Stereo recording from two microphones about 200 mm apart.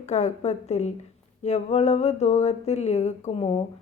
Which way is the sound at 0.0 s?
35° left (ahead or behind).